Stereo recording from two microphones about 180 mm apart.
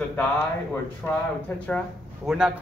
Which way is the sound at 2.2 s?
5° right (ahead or behind).